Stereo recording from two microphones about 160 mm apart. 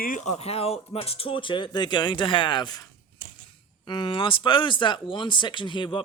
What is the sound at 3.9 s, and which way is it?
Speech, 30° left (ahead or behind).